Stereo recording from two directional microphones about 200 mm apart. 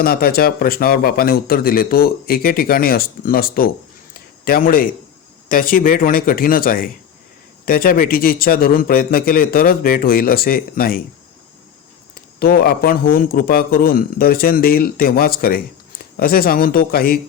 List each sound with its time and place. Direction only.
0.0 s speech: 50° left (ahead or behind)
4.1 s a sound: 45° left (ahead or behind)
5.5 s speech: 45° left (ahead or behind)
12.4 s speech: 50° left (ahead or behind)